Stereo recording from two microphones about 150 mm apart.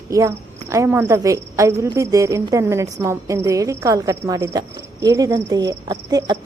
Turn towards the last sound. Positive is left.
turn(degrees=-25)  # may be behind; listen again after turning